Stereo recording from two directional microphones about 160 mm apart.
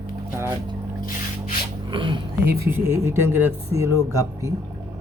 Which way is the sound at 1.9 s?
30° right (ahead or behind).